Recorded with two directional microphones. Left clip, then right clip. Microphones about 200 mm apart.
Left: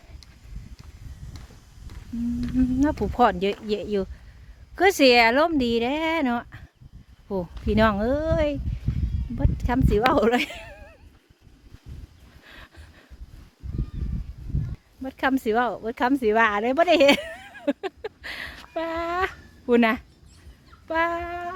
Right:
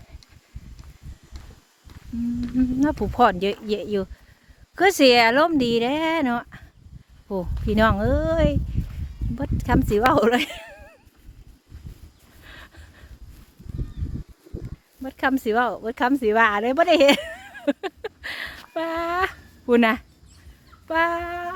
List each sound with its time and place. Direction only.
3.0 s speech: 10° right (ahead or behind)
12.4 s a sound: 10° right (ahead or behind)
15.0 s speech: 5° right (ahead or behind)
20.8 s fowl: 15° right (ahead or behind)